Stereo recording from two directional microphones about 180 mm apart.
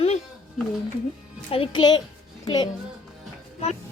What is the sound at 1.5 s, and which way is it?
A child's voice, 30° left (ahead or behind).